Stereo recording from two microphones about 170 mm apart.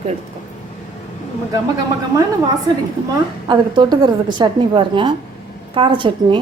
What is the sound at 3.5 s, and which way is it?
A woman's voice, 25° right (ahead or behind).